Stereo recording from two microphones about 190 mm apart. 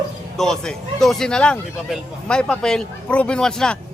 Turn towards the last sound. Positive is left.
turn(degrees=5)  # may be behind; listen again after turning